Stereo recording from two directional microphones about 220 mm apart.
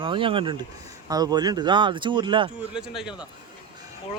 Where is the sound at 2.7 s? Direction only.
5° right (ahead or behind).